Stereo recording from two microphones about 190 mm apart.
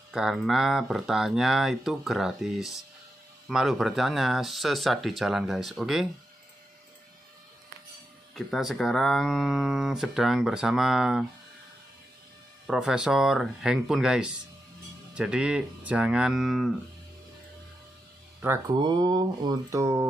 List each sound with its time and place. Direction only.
0.1 s speech: centre (ahead or behind)
8.4 s speech: centre (ahead or behind)
12.6 s speech: 5° right (ahead or behind)
18.7 s speech: 25° right (ahead or behind)